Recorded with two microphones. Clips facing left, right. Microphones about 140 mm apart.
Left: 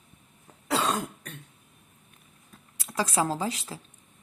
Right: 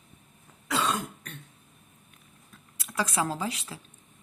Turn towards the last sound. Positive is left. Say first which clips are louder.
# left 2 dB
turn(degrees=35)  # may be behind; listen again after turning